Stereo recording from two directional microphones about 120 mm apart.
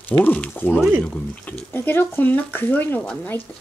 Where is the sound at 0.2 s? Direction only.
15° left (ahead or behind).